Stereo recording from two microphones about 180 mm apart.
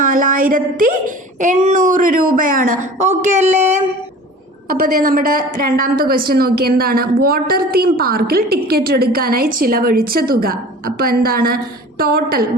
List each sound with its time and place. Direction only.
0.0 s a woman's voice: 50° right (ahead or behind)
4.7 s a woman's voice: 55° right (ahead or behind)